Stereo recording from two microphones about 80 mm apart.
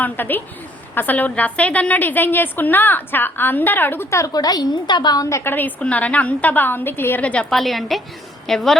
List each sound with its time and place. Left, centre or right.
0.0 s a woman's voice: left
4.3 s a woman's voice: left
4.7 s a woman's voice: left
5.2 s a woman's voice: left; by 7.4 s centre
7.5 s a woman's voice: centre